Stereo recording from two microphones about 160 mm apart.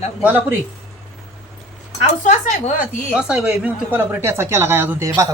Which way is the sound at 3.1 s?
5° right (ahead or behind).